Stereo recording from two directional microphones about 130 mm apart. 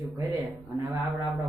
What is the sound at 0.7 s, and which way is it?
Speech, 25° right (ahead or behind).